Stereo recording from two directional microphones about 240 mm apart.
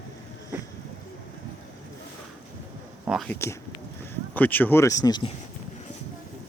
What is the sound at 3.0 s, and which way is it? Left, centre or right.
Speech, centre.